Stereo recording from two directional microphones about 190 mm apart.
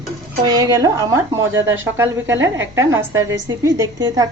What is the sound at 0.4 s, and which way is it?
A woman's voice, 20° right (ahead or behind).